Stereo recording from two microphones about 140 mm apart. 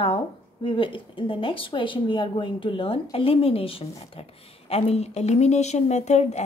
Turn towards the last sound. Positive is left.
turn(degrees=50)  # may be behind; listen again after turning